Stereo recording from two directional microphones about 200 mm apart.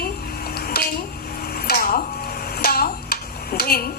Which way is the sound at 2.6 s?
50° left (ahead or behind).